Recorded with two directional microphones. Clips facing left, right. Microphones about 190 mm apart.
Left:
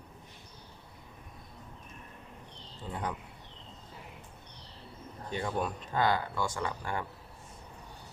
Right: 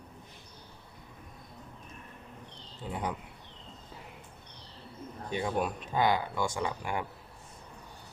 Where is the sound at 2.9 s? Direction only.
10° right (ahead or behind).